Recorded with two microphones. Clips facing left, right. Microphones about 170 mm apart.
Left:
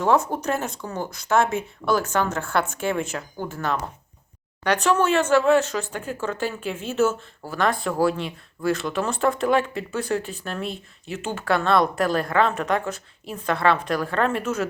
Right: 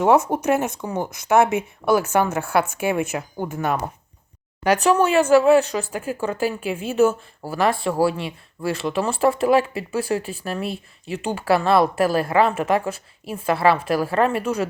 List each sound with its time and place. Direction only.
0.0 s speech: 20° right (ahead or behind)
4.9 s a woman's voice: 10° right (ahead or behind)